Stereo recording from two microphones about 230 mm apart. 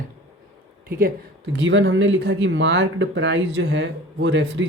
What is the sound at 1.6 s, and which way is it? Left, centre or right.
Speech, right.